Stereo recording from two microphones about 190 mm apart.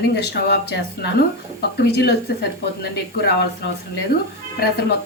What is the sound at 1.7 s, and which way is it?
Speech, 60° left (ahead or behind).